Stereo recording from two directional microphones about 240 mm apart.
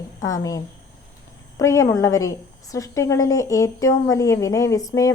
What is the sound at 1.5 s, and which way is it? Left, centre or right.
A woman's voice, centre.